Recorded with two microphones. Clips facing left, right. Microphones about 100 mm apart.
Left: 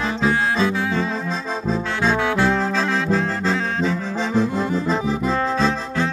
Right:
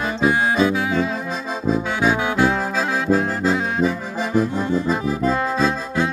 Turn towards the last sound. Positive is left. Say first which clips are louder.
# right 1 dB
turn(degrees=-10)  # may be behind; listen again after turning